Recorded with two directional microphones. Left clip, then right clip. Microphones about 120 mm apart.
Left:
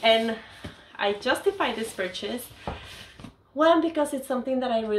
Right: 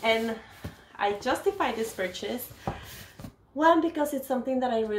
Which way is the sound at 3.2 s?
45° right (ahead or behind).